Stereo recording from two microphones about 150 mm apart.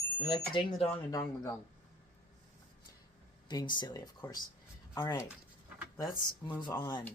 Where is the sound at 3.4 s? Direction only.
30° left (ahead or behind).